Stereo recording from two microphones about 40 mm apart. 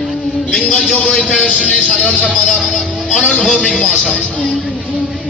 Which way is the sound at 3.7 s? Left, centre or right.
Centre.